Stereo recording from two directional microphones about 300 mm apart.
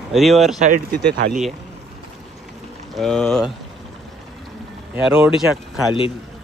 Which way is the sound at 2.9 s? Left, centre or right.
Centre.